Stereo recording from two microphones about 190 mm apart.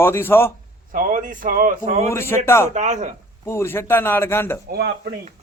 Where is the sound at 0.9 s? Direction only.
45° right (ahead or behind).